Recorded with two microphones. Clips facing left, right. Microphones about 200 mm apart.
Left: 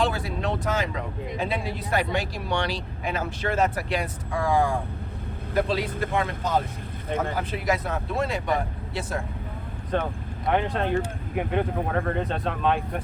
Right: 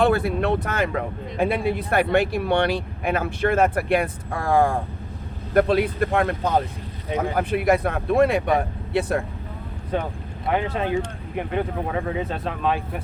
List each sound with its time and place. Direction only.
0.0 s speech: 60° right (ahead or behind)
9.9 s speech: 10° right (ahead or behind)